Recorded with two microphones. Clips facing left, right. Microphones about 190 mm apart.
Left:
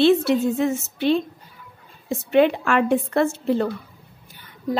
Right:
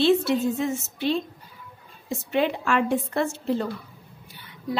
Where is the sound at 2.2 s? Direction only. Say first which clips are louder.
Left 7 dB; 60° left (ahead or behind).